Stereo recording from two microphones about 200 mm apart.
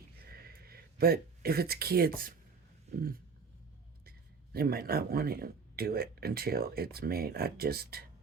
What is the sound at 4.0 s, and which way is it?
Speech, 50° right (ahead or behind).